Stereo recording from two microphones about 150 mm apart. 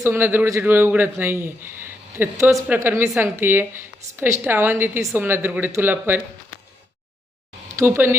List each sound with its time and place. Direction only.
0.0 s a woman's voice: 15° right (ahead or behind)
7.8 s a woman's voice: 15° right (ahead or behind)